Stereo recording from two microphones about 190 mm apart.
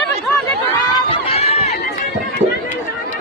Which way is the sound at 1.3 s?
35° left (ahead or behind).